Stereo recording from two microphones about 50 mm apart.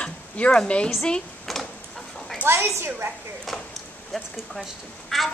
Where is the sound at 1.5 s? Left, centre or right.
Centre.